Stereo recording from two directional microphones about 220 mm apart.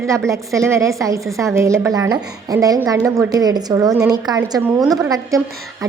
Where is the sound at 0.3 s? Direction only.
15° right (ahead or behind).